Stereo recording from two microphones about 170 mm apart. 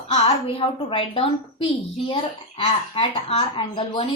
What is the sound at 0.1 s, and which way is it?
A woman's voice, 35° left (ahead or behind).